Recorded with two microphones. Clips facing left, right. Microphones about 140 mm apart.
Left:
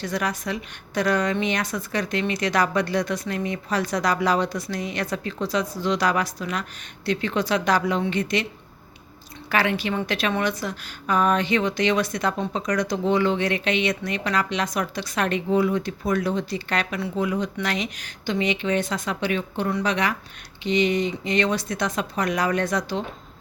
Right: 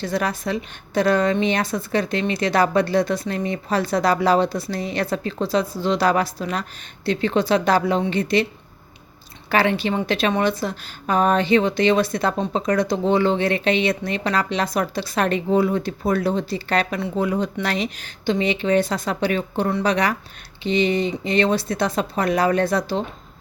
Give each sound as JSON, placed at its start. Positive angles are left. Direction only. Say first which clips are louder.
{"t": 0.0, "sound": "a woman's voice", "louder": "right 3 dB", "side_deg": -30}
{"t": 9.5, "sound": "a woman's voice", "louder": "right 4 dB", "side_deg": -30}